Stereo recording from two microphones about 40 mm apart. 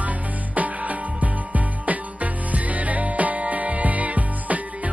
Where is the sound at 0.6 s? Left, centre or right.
Right.